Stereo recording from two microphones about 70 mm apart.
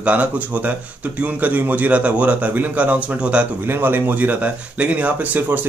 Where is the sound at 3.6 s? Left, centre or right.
Right.